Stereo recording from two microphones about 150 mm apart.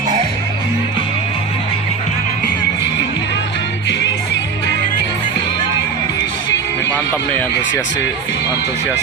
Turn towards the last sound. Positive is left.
turn(degrees=10)  # may be behind; listen again after turning